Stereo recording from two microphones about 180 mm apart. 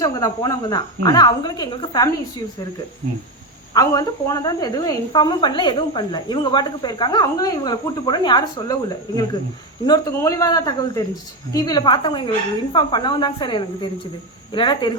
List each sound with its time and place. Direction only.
0.0 s a woman's voice: 20° left (ahead or behind)
3.8 s a woman's voice: 20° left (ahead or behind)